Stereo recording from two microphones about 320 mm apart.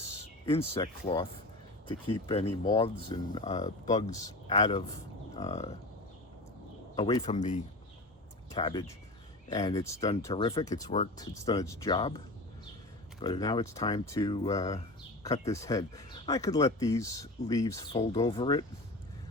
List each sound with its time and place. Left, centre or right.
0.4 s speech: centre
6.9 s speech: centre
13.2 s speech: centre